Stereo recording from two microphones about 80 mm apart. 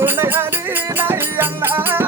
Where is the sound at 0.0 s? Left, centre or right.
Right.